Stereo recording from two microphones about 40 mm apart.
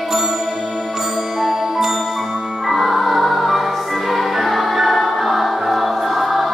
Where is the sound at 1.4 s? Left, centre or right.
Centre.